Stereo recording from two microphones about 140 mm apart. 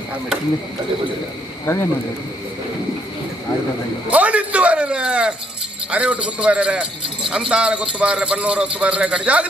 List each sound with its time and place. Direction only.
1.7 s speech: 20° left (ahead or behind)
4.1 s speech: 10° right (ahead or behind)